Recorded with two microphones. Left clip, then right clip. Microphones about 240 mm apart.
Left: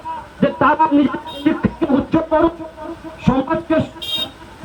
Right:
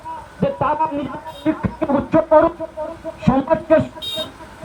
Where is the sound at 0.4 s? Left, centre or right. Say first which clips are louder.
Left 4 dB; right.